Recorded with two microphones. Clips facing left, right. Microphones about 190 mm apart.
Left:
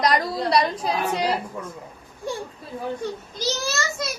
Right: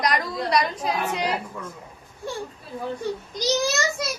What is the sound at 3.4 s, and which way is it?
Speech, 15° right (ahead or behind).